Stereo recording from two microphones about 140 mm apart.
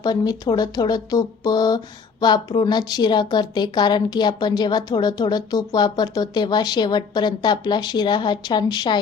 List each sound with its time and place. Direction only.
0.0 s a woman's voice: 30° left (ahead or behind)